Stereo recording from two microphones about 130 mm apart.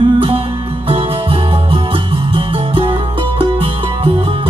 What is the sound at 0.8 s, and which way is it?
Music, 45° right (ahead or behind).